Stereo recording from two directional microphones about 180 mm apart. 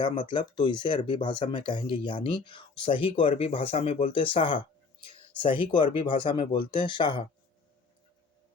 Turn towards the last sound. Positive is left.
turn(degrees=30)  # may be behind; listen again after turning